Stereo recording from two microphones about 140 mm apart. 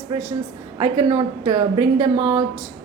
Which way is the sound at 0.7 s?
25° right (ahead or behind).